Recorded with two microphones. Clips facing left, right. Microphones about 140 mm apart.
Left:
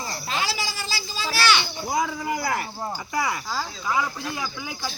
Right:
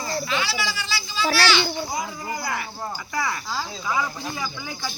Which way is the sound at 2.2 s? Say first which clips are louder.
Left 3 dB; 70° left (ahead or behind).